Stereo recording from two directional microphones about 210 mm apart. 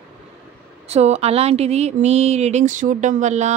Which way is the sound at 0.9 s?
30° right (ahead or behind).